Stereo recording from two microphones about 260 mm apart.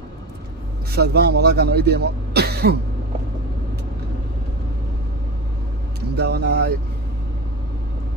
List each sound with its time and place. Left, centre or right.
0.9 s speech: right
5.9 s speech: right